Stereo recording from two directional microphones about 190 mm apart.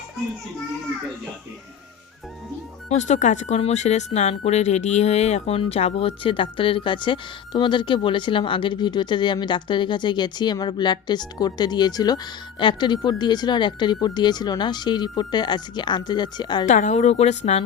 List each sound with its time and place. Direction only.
2.9 s speech: 40° left (ahead or behind); by 16.6 s 25° left (ahead or behind)
16.6 s speech: 40° left (ahead or behind)